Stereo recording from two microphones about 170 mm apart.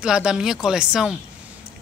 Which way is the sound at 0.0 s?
5° right (ahead or behind).